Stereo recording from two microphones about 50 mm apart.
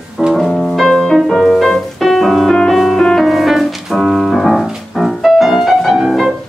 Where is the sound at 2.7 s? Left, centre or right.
Centre.